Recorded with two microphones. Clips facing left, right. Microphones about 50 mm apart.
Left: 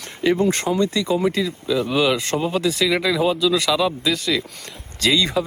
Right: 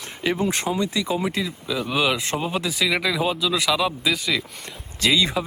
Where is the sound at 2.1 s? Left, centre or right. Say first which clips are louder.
Left 3 dB; centre.